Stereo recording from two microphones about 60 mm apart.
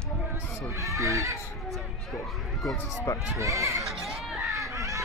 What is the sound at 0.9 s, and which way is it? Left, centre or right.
Speech, right.